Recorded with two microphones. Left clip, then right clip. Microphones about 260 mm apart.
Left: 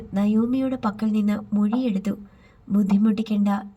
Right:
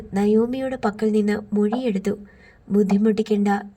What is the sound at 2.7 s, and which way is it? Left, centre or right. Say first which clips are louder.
Speech: right 5 dB; right.